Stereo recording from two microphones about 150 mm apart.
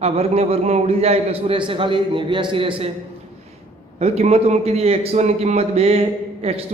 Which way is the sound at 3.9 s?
45° right (ahead or behind).